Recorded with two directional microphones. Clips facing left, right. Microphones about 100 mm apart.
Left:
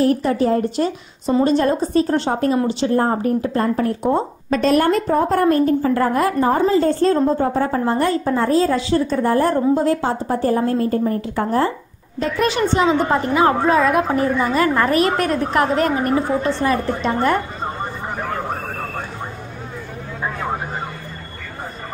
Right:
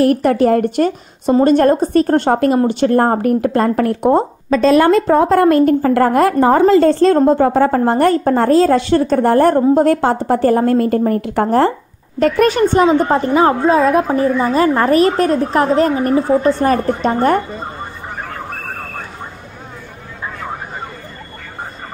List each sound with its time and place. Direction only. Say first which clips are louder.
0.0 s speech: right 5 dB; 65° right (ahead or behind)
4.8 s a woman's voice: right 6 dB; 90° right
7.2 s a woman's voice: right 6 dB; 80° right; by 8.2 s 60° right (ahead or behind)
8.2 s a woman's voice: right 5 dB; 50° right (ahead or behind)
8.5 s a woman's voice: right 6 dB; 75° right (ahead or behind)
12.2 s a woman's voice: right 7 dB; 50° right (ahead or behind)